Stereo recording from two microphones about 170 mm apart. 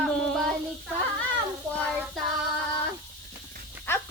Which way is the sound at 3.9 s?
15° left (ahead or behind).